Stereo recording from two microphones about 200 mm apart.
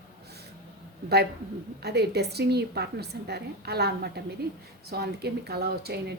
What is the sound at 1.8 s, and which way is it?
A woman's voice, 55° right (ahead or behind).